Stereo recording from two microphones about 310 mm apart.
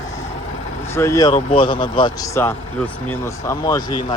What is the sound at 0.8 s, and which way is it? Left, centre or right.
Speech, centre.